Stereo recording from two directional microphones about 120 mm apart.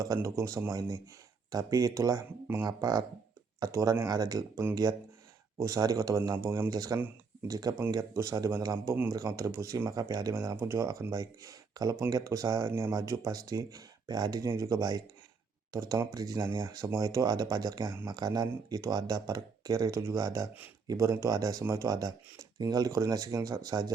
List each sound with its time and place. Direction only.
0.0 s speech: 25° right (ahead or behind)
18.2 s speech: 30° right (ahead or behind)